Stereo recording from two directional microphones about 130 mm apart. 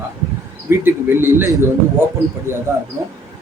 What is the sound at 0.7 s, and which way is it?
Speech, 20° right (ahead or behind).